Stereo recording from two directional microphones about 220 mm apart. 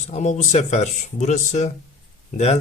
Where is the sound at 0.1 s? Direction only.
30° left (ahead or behind).